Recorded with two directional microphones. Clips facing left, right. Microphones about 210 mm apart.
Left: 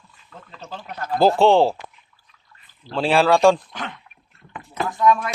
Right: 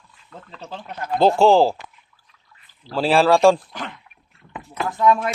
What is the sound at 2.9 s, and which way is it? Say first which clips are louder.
Speech: right 1 dB; centre (ahead or behind).